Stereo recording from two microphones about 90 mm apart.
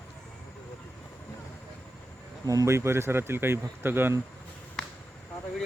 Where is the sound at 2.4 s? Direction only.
45° right (ahead or behind).